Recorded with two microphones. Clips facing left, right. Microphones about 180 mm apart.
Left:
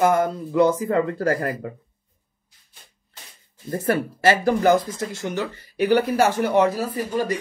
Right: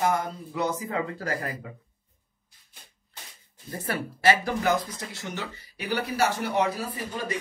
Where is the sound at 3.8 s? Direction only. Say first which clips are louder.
Left 4 dB; 45° left (ahead or behind).